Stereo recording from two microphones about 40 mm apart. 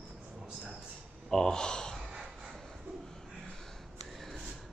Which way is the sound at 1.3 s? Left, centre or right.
Centre.